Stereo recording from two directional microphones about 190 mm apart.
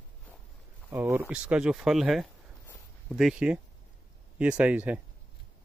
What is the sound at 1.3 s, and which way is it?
Speech, 5° right (ahead or behind).